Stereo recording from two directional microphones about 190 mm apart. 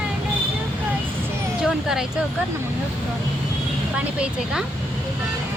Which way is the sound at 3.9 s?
5° right (ahead or behind).